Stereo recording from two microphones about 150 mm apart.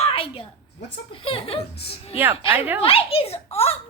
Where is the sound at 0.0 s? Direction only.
40° left (ahead or behind).